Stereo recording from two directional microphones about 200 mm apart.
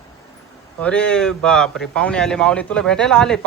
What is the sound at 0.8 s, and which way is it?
Speech, 5° left (ahead or behind).